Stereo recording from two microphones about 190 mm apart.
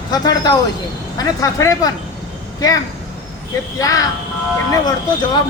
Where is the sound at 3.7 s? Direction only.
20° left (ahead or behind).